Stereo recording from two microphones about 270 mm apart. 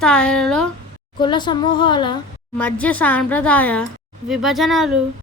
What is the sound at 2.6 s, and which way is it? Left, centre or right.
A woman's voice, centre.